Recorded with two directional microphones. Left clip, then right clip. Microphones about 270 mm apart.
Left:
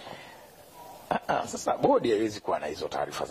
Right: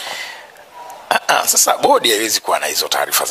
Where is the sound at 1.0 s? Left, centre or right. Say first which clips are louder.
Right 14 dB; centre.